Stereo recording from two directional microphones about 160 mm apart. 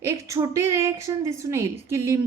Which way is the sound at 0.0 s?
20° right (ahead or behind).